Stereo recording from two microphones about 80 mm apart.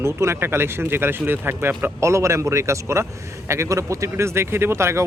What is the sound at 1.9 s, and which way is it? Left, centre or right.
Speech, right.